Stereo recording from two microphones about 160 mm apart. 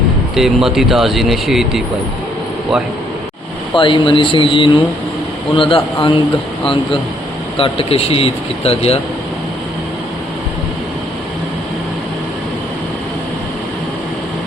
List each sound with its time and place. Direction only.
0.3 s speech: centre (ahead or behind)
3.8 s speech: 30° left (ahead or behind)
7.5 s speech: 35° left (ahead or behind)